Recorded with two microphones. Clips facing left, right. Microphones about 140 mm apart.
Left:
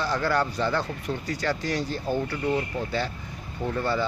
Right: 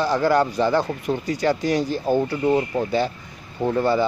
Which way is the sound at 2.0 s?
40° right (ahead or behind).